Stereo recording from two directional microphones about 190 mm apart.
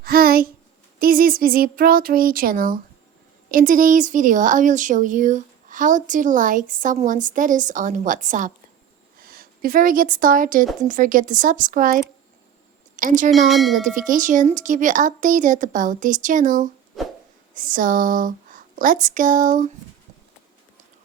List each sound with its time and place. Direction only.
0.0 s a sound: 50° right (ahead or behind)
0.9 s speech: 50° right (ahead or behind)
13.0 s speech: 45° right (ahead or behind)
13.5 s speech: centre (ahead or behind)
13.8 s speech: 45° right (ahead or behind)